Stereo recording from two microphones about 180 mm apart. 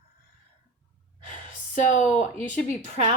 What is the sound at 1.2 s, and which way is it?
Speech, 45° left (ahead or behind).